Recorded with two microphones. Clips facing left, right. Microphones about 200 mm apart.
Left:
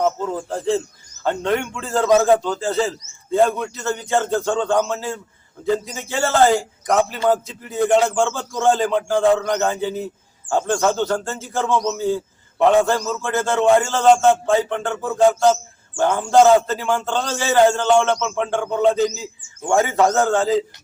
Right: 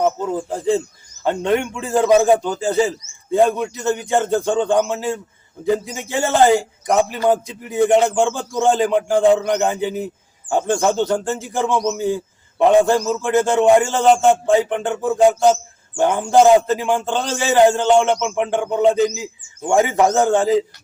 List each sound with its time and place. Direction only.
0.0 s speech: 15° right (ahead or behind)